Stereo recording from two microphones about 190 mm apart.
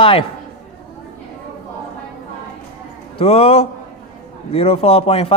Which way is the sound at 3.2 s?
30° left (ahead or behind).